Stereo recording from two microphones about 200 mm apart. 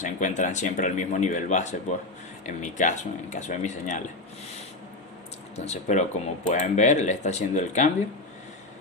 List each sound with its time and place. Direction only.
0.0 s speech: 40° left (ahead or behind)
5.5 s speech: 35° left (ahead or behind)